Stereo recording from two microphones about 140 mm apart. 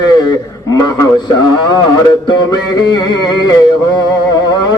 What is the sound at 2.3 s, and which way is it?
Music, 30° left (ahead or behind).